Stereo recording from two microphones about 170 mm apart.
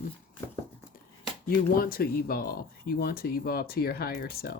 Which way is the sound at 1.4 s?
60° left (ahead or behind).